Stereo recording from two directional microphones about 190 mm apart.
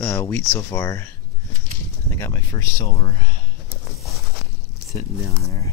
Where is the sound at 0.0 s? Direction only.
10° left (ahead or behind).